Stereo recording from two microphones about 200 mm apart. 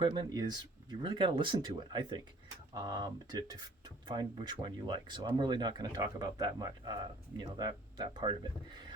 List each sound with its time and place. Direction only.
0.0 s speech: 25° right (ahead or behind)